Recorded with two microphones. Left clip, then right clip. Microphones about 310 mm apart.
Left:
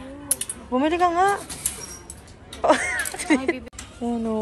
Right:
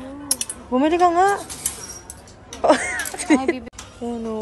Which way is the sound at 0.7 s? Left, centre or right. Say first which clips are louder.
Right 4 dB; centre.